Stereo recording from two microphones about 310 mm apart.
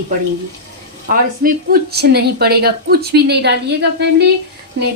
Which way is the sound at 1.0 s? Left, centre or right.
Right.